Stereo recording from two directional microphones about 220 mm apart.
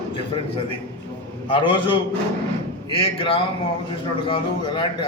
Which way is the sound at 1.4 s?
20° left (ahead or behind).